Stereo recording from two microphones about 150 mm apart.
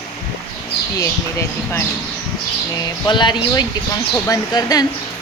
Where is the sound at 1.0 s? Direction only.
20° left (ahead or behind).